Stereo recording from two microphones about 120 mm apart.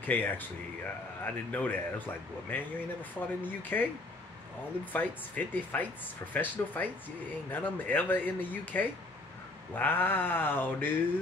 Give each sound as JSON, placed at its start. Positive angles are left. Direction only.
{"t": 0.0, "sound": "speech", "side_deg": 15}
{"t": 4.9, "sound": "speech", "side_deg": 15}